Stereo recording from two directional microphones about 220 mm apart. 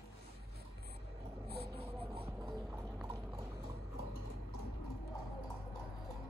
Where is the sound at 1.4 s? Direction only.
45° right (ahead or behind).